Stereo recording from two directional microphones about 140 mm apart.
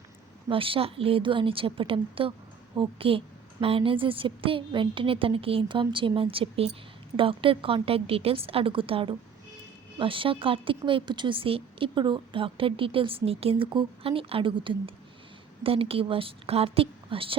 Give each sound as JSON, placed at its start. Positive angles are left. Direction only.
{"t": 0.4, "sound": "speech", "side_deg": -40}